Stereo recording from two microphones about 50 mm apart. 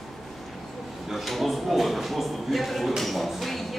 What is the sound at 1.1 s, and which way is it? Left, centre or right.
A man's voice, centre.